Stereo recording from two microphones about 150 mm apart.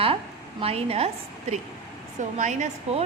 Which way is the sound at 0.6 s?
40° right (ahead or behind).